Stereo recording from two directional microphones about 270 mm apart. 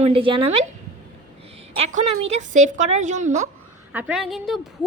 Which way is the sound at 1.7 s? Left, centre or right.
Right.